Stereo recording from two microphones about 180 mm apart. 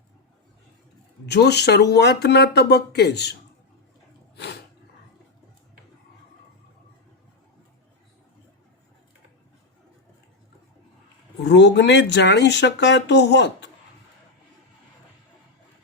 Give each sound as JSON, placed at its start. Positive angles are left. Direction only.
{"t": 1.3, "sound": "speech", "side_deg": 70}
{"t": 11.4, "sound": "speech", "side_deg": 75}